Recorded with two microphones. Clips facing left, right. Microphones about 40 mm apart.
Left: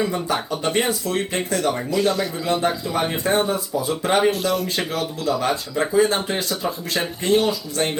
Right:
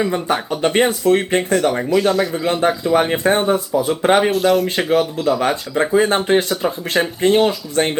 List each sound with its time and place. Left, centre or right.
0.5 s speech: right
1.9 s speech: centre
2.3 s speech: right
4.3 s speech: centre
4.8 s speech: right